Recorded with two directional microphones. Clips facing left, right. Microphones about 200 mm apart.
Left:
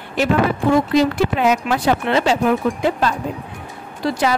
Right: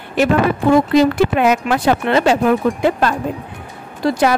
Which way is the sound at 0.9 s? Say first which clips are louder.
Right 3 dB; 60° right (ahead or behind).